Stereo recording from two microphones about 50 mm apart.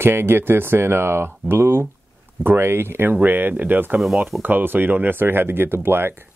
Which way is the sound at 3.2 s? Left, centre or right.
Right.